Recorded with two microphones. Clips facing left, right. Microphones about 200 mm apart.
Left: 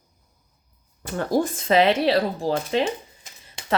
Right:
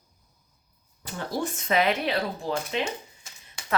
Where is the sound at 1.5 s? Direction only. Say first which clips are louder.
Left 3 dB; 30° left (ahead or behind).